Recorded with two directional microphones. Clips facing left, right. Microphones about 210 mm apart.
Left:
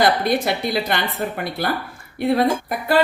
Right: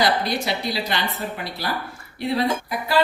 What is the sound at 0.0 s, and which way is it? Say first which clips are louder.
A woman's voice: left 4 dB; 55° left (ahead or behind).